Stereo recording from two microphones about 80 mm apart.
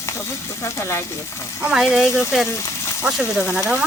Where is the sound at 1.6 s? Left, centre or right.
Centre.